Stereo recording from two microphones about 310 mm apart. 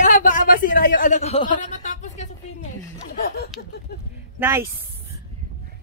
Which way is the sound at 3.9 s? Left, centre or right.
Left.